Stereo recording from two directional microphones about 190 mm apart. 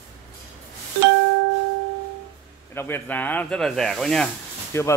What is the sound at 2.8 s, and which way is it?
Speech, 10° left (ahead or behind).